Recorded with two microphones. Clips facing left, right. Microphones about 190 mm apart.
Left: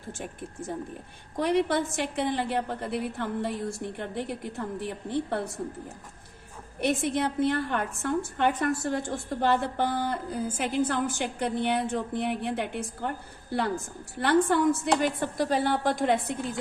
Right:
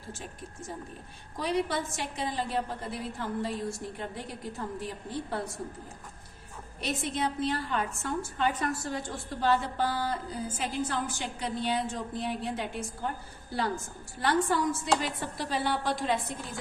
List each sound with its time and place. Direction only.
1.4 s a woman's voice: 60° left (ahead or behind)
6.7 s a woman's voice: 55° left (ahead or behind)